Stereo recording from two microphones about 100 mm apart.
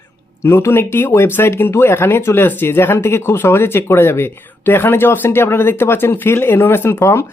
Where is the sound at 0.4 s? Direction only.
25° left (ahead or behind).